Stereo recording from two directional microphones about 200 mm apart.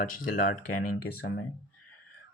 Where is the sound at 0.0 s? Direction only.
45° left (ahead or behind).